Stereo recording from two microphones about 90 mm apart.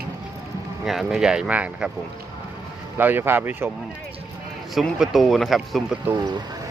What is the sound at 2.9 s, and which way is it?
Speech, 25° right (ahead or behind).